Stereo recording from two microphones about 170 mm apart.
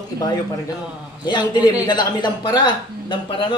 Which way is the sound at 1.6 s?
10° right (ahead or behind).